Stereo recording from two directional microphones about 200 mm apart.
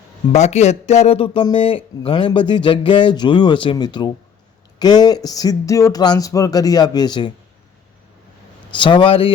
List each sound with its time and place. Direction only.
0.3 s speech: 35° left (ahead or behind)
8.7 s speech: 25° left (ahead or behind)